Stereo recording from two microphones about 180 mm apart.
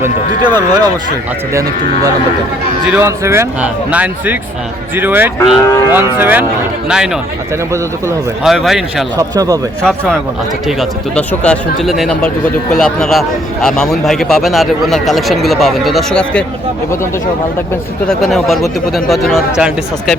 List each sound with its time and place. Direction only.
0.4 s speech: 20° right (ahead or behind)
2.8 s a man's voice: 10° right (ahead or behind)
8.4 s a man's voice: centre (ahead or behind)
9.1 s speech: 20° right (ahead or behind)
9.8 s a man's voice: 5° left (ahead or behind)
18.1 s a man's voice: centre (ahead or behind)